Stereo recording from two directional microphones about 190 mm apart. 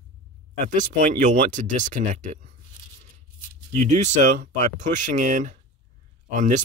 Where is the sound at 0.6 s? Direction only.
45° right (ahead or behind).